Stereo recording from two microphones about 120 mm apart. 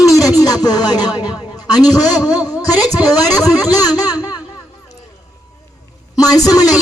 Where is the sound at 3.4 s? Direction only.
30° left (ahead or behind).